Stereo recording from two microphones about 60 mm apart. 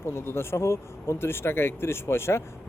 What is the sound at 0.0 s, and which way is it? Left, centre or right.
Speech, left.